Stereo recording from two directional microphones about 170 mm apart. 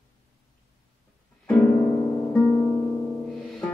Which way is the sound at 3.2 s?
Centre (ahead or behind).